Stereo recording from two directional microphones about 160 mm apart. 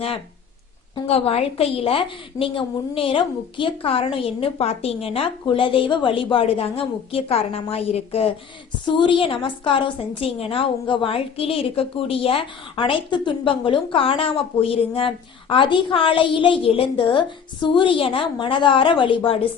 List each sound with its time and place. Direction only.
1.0 s a woman's voice: 40° left (ahead or behind)